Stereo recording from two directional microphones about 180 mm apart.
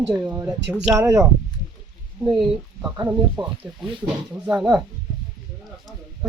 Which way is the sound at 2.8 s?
15° right (ahead or behind).